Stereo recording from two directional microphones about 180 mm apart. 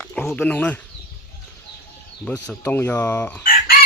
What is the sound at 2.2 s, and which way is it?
Speech, 10° left (ahead or behind).